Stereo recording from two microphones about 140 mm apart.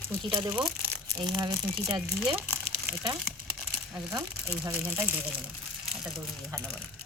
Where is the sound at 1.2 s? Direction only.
30° right (ahead or behind).